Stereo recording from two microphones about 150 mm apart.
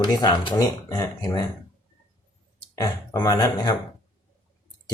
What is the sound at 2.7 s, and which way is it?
Speech, 25° left (ahead or behind).